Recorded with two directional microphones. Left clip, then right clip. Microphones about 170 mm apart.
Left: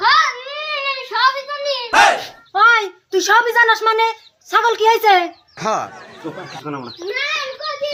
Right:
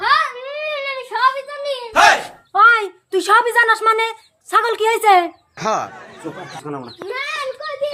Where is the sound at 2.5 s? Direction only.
15° right (ahead or behind).